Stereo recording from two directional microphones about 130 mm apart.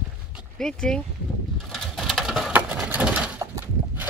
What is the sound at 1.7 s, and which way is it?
Pigeon, centre (ahead or behind).